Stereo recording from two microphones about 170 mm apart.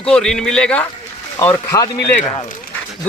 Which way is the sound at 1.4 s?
20° left (ahead or behind).